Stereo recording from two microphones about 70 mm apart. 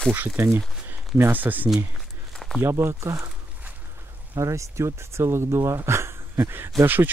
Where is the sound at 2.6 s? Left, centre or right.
Right.